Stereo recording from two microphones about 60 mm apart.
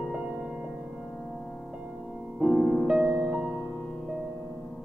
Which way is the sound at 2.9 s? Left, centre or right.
Centre.